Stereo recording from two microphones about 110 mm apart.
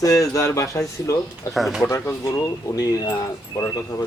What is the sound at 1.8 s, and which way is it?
Speech, 25° left (ahead or behind).